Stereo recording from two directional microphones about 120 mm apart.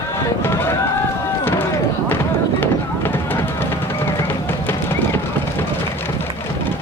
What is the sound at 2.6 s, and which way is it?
Music, 15° left (ahead or behind).